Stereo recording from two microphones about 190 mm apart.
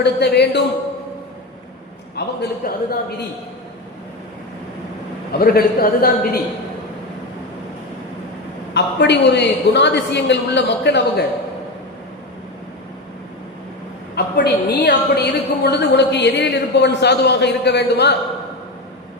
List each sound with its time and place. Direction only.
0.0 s a woman's voice: 60° left (ahead or behind)
2.1 s a man's voice: 60° left (ahead or behind)
5.3 s a man's voice: 50° left (ahead or behind)
8.7 s a woman's voice: 65° left (ahead or behind)
14.2 s a woman's voice: 60° left (ahead or behind)